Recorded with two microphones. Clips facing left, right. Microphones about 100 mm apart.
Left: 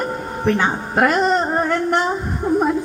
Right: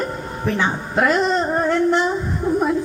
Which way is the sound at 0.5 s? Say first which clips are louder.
Right 2 dB; 45° left (ahead or behind).